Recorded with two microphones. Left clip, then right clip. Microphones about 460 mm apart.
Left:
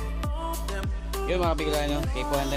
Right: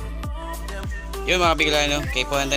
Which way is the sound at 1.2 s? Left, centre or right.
Left.